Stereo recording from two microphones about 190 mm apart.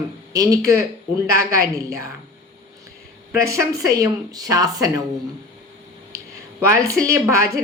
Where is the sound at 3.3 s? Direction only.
15° right (ahead or behind).